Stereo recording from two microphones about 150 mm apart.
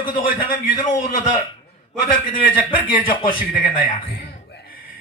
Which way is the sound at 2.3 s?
70° left (ahead or behind).